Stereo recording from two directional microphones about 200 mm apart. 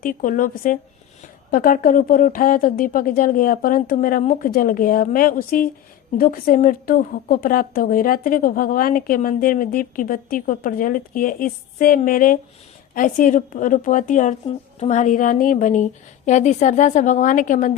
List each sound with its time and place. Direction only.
0.0 s a woman's voice: 45° left (ahead or behind)